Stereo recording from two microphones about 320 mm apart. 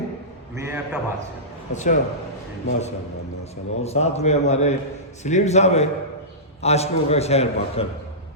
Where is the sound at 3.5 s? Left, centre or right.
Centre.